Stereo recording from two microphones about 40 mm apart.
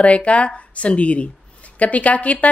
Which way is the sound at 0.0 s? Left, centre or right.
Left.